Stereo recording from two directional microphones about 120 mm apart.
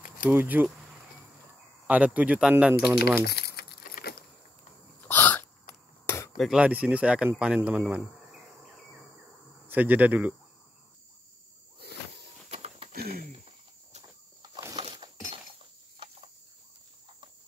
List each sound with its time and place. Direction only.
0.3 s speech: 15° right (ahead or behind)
1.9 s speech: 10° right (ahead or behind)
5.0 s sneeze: 15° left (ahead or behind)
6.0 s cutlery: 20° left (ahead or behind)
6.3 s cutlery: centre (ahead or behind)
6.6 s speech: 15° right (ahead or behind)
9.7 s speech: 15° right (ahead or behind)
12.4 s a sound: 60° right (ahead or behind)
14.8 s breaking: 40° right (ahead or behind)